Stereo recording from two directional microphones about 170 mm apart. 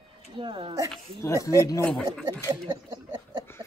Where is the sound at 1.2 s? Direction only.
20° left (ahead or behind).